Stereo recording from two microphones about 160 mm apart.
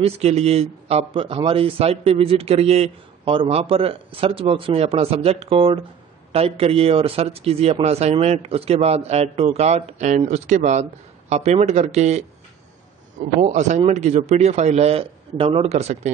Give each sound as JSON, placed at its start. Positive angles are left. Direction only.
{"t": 0.0, "sound": "speech", "side_deg": -40}
{"t": 13.2, "sound": "a man's voice", "side_deg": -50}